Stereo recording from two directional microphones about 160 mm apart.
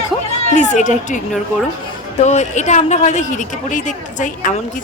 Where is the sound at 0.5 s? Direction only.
50° left (ahead or behind).